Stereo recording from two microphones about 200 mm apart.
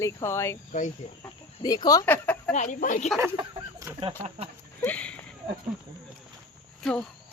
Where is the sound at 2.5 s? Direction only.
40° left (ahead or behind).